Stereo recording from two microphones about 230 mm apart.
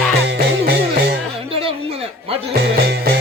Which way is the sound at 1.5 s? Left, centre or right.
Right.